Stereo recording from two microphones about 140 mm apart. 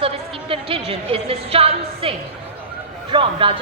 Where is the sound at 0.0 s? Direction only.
40° right (ahead or behind).